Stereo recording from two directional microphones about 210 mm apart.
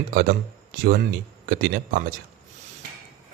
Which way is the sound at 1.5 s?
40° right (ahead or behind).